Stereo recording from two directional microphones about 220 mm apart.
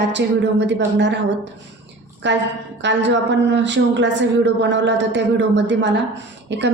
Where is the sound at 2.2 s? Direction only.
55° right (ahead or behind).